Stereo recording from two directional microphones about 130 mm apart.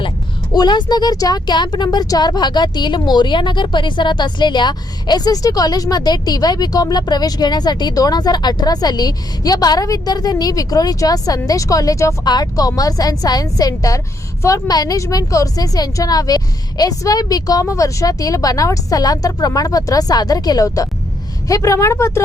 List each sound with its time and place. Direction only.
0.5 s a woman's voice: 35° left (ahead or behind)